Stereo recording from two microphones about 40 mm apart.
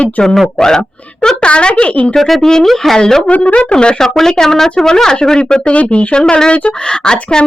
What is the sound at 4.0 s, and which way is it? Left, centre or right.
Speech, centre.